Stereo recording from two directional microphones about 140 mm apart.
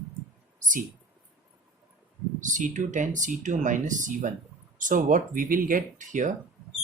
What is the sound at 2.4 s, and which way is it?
Speech, 65° right (ahead or behind).